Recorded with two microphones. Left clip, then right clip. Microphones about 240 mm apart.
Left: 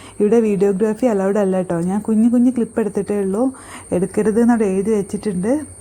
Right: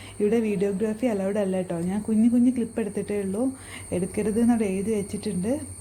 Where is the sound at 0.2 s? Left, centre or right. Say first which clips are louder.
Left 9 dB; left.